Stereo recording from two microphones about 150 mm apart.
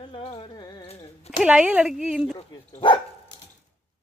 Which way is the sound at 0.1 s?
40° left (ahead or behind).